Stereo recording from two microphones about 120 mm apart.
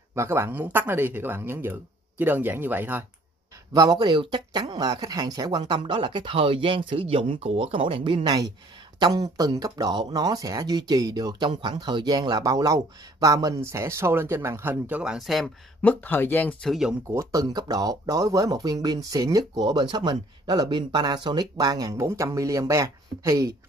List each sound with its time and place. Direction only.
0.1 s speech: 20° right (ahead or behind)
3.7 s speech: 30° right (ahead or behind)
9.4 s speech: 30° right (ahead or behind); by 15.1 s 10° right (ahead or behind)
15.1 s speech: centre (ahead or behind)
15.8 s speech: 15° left (ahead or behind)
16.6 s speech: centre (ahead or behind)
17.1 s speech: 25° right (ahead or behind)